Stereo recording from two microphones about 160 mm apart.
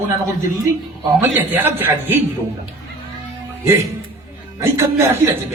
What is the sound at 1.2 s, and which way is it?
A man's voice, 15° right (ahead or behind).